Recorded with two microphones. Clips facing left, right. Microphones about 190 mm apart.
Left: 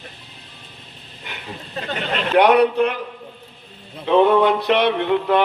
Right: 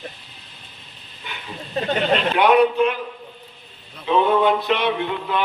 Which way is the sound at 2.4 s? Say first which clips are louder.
Left 2 dB; 70° left (ahead or behind).